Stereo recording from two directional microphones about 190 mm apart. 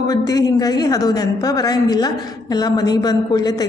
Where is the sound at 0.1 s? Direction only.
20° left (ahead or behind).